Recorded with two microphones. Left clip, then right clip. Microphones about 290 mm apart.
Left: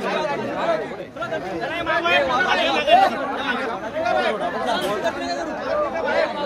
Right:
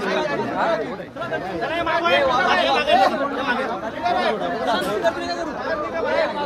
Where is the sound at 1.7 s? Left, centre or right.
Right.